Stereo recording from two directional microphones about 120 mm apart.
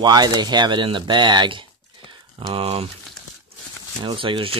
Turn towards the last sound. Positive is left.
turn(degrees=-45)  # may be behind; listen again after turning